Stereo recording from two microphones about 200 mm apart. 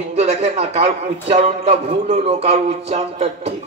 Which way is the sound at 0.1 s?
30° right (ahead or behind).